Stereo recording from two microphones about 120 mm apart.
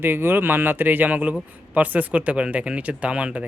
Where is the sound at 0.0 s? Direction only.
20° right (ahead or behind).